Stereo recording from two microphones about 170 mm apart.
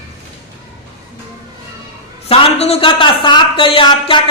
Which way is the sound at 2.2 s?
35° left (ahead or behind).